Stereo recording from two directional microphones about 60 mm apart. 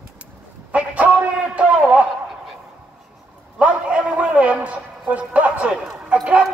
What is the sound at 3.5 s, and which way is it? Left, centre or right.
A man's voice, centre.